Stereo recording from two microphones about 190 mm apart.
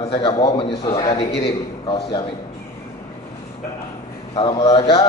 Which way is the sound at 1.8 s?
25° left (ahead or behind).